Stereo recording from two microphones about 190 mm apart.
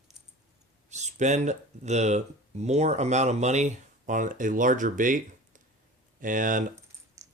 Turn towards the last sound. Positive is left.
turn(degrees=-15)  # may be behind; listen again after turning